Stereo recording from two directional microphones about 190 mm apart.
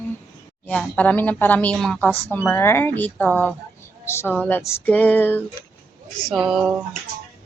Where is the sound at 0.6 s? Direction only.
5° left (ahead or behind).